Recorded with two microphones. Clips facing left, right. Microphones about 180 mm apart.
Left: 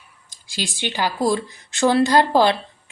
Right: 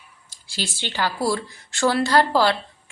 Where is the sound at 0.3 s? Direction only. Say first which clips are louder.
Left 2 dB; 15° left (ahead or behind).